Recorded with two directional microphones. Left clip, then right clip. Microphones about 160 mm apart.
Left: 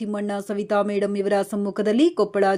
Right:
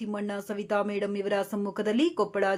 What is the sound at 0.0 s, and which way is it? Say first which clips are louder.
Speech: left 6 dB; 30° left (ahead or behind).